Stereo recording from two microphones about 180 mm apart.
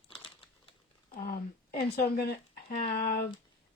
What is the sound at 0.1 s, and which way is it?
Crumpling, 30° left (ahead or behind).